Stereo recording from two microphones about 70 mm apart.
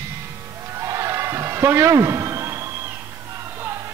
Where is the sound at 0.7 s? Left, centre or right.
Right.